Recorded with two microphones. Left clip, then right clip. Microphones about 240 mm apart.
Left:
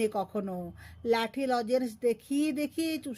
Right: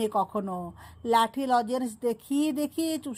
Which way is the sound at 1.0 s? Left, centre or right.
Centre.